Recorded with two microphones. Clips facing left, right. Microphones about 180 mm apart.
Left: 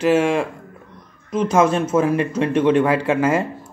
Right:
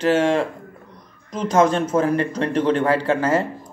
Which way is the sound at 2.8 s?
30° right (ahead or behind).